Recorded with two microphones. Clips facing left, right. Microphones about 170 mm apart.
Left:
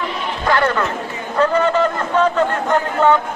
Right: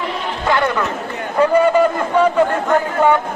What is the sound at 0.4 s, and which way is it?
A man's voice, 15° right (ahead or behind).